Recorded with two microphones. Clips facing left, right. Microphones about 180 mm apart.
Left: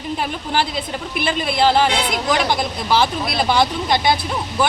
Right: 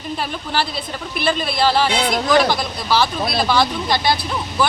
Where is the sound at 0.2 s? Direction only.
15° left (ahead or behind).